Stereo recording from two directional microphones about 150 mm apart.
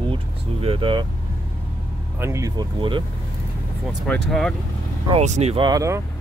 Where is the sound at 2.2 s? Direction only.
20° right (ahead or behind).